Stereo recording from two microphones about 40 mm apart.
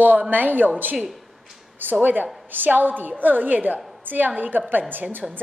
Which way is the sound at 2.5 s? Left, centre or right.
Right.